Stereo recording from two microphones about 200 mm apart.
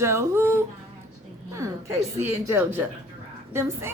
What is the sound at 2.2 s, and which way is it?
Speech, 15° right (ahead or behind).